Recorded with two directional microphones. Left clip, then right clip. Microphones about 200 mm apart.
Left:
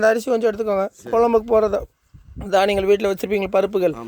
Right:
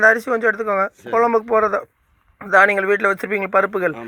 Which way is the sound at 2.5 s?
25° left (ahead or behind).